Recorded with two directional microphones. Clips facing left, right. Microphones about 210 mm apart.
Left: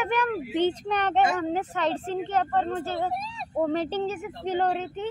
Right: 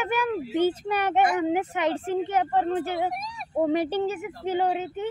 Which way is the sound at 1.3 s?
15° right (ahead or behind).